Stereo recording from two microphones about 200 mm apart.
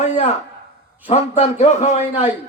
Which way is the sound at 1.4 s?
35° left (ahead or behind).